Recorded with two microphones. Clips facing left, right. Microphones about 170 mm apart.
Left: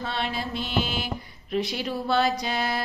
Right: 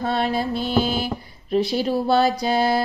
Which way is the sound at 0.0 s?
40° right (ahead or behind).